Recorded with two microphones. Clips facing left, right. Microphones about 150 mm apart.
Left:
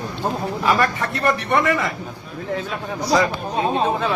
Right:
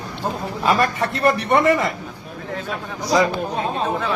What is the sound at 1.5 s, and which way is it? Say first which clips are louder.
Speech: right 3 dB; 20° right (ahead or behind).